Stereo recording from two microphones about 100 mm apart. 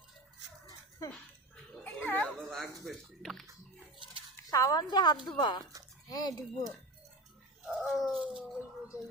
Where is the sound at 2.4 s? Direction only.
5° left (ahead or behind).